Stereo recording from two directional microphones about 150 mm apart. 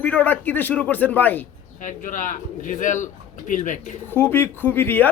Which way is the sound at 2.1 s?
60° left (ahead or behind).